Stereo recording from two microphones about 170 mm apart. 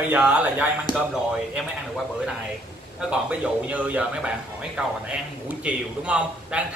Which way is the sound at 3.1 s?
5° right (ahead or behind).